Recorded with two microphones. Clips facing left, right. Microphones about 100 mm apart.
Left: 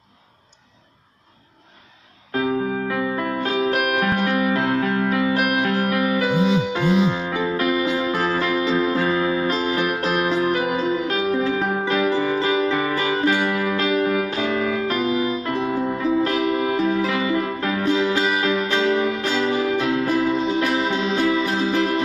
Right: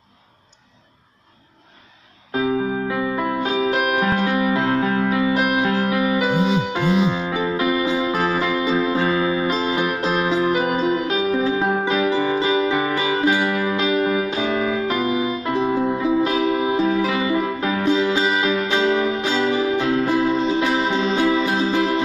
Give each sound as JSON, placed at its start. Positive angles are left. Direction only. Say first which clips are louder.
{"t": 2.3, "sound": "music", "louder": "right 1 dB", "side_deg": -15}
{"t": 5.3, "sound": "music", "louder": "right 1 dB", "side_deg": -20}
{"t": 6.7, "sound": "music", "louder": "even", "side_deg": -5}
{"t": 7.4, "sound": "music", "louder": "even", "side_deg": -15}
{"t": 20.1, "sound": "music", "louder": "right 1 dB", "side_deg": -25}
{"t": 21.5, "sound": "music", "louder": "right 1 dB", "side_deg": -10}